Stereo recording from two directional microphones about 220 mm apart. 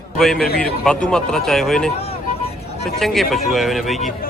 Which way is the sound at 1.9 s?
25° left (ahead or behind).